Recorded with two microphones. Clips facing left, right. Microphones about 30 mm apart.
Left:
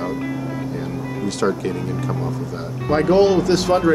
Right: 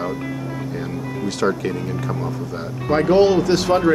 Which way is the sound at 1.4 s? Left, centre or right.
Centre.